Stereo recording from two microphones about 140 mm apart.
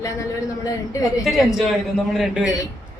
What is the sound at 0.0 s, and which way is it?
A woman's voice, 25° left (ahead or behind).